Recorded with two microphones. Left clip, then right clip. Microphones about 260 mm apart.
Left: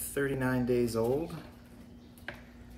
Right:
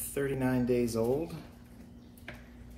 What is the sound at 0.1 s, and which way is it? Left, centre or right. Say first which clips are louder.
Speech: even; centre.